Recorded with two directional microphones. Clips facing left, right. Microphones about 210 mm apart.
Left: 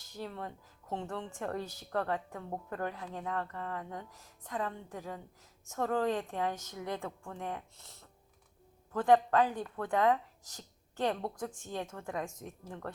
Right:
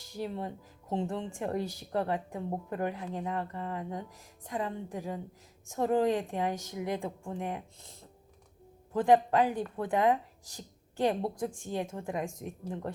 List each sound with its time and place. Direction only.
0.1 s a woman's voice: 15° right (ahead or behind)